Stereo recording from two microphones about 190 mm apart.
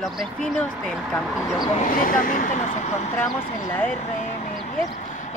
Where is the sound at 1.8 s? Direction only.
45° left (ahead or behind).